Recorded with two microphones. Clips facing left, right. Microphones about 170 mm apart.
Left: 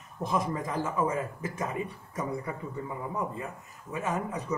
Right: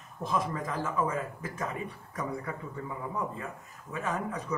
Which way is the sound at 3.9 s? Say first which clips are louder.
Left 1 dB; 20° left (ahead or behind).